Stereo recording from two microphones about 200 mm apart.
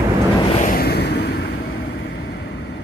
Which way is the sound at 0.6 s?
45° left (ahead or behind).